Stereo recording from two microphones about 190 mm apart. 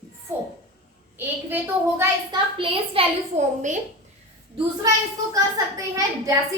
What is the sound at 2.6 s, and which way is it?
A woman's voice, 30° right (ahead or behind).